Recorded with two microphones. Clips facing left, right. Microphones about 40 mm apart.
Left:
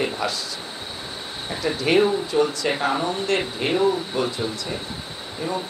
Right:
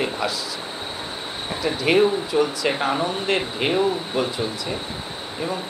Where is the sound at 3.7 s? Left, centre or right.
Centre.